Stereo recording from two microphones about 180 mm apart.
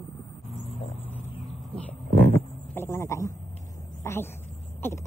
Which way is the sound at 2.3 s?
10° left (ahead or behind).